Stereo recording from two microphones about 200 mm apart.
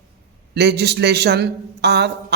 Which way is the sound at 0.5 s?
55° right (ahead or behind).